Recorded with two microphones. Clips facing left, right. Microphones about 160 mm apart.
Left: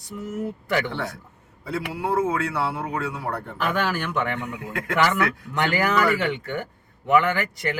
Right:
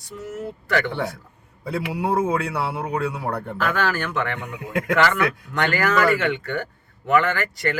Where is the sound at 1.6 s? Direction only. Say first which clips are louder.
Right 2 dB; 15° right (ahead or behind).